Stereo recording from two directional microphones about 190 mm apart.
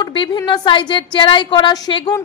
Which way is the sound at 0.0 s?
25° left (ahead or behind).